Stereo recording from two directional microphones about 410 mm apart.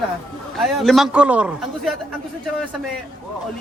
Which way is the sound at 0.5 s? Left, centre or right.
Centre.